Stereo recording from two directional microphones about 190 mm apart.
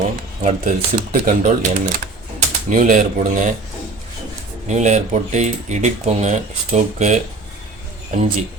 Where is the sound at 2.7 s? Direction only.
40° right (ahead or behind).